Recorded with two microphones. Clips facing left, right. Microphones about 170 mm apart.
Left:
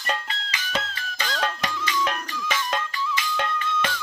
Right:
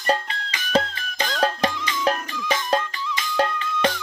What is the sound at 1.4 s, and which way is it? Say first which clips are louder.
Music: right 6 dB; 35° right (ahead or behind).